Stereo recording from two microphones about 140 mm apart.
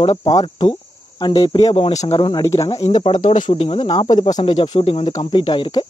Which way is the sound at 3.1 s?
65° left (ahead or behind).